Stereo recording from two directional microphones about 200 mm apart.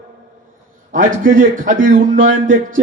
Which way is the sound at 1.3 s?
40° right (ahead or behind).